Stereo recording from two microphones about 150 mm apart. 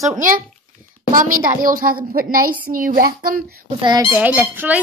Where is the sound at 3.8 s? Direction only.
30° right (ahead or behind).